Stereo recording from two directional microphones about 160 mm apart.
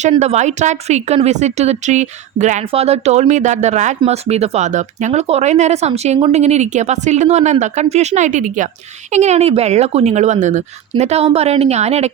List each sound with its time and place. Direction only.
0.1 s a woman's voice: 45° right (ahead or behind)